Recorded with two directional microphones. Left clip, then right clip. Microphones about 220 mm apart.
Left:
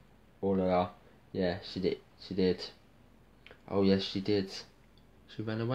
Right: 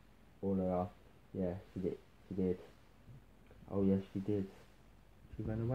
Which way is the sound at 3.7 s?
30° left (ahead or behind).